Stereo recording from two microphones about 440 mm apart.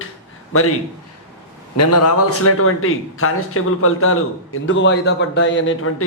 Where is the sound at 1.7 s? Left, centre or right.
Left.